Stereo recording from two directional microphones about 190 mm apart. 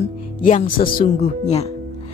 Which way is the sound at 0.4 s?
45° left (ahead or behind).